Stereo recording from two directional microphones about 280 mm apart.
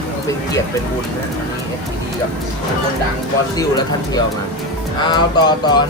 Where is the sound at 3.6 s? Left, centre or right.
Centre.